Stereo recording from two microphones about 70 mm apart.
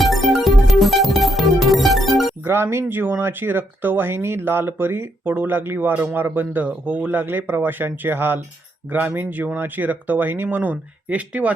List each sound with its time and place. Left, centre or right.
0.0 s music: centre
2.4 s speech: right